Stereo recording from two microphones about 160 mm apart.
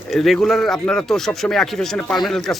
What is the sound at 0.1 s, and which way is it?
A man's voice, centre (ahead or behind).